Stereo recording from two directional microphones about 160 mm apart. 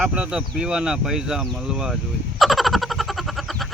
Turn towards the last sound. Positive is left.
turn(degrees=0)  # may be behind; listen again after turning